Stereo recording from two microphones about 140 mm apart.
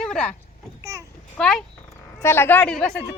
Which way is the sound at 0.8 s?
20° right (ahead or behind).